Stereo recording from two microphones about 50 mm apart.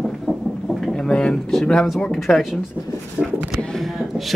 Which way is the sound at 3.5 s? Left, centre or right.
Centre.